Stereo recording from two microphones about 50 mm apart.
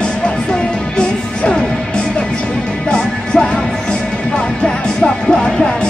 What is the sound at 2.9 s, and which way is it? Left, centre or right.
Music, centre.